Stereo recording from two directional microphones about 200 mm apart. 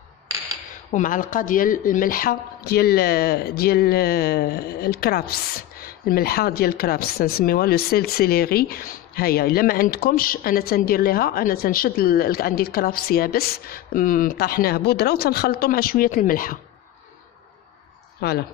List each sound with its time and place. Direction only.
0.9 s a woman's voice: 40° left (ahead or behind)
18.2 s a woman's voice: 50° left (ahead or behind)